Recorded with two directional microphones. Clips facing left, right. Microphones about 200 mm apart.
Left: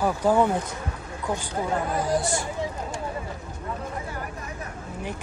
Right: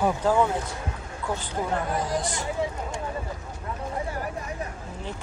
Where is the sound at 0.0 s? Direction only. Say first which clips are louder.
Left 1 dB; 15° left (ahead or behind).